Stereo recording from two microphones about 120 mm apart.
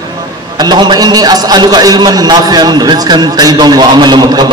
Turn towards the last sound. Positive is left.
turn(degrees=-35)  # may be behind; listen again after turning